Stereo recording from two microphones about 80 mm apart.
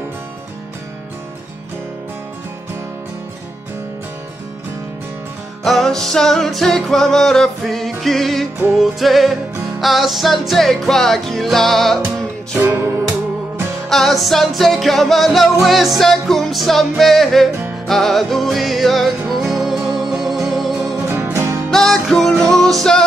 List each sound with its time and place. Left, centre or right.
5.6 s music: centre
12.5 s music: right
13.8 s music: centre
21.1 s music: right
21.7 s music: centre